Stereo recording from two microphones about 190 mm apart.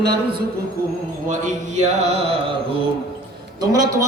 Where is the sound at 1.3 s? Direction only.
40° right (ahead or behind).